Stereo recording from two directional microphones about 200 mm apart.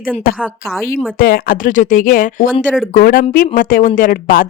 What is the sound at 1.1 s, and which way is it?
Speech, 45° left (ahead or behind).